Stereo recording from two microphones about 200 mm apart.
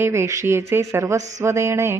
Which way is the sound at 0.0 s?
15° right (ahead or behind).